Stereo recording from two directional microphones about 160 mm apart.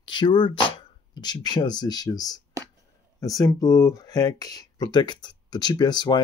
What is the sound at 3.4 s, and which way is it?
Speech, 20° left (ahead or behind).